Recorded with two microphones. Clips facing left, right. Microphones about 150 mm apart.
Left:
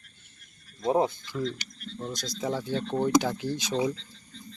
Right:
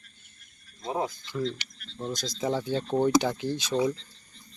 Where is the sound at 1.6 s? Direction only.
40° left (ahead or behind).